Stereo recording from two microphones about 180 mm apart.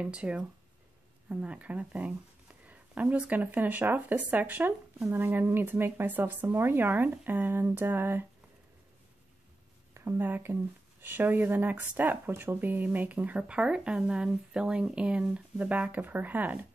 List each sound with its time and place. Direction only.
0.0 s speech: 5° right (ahead or behind)
9.9 s speech: 15° right (ahead or behind)